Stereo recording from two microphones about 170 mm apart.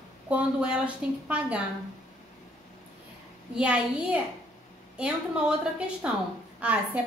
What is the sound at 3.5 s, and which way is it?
Speech, 5° right (ahead or behind).